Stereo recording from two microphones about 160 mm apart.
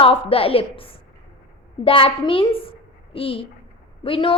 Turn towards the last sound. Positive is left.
turn(degrees=35)  # may be behind; listen again after turning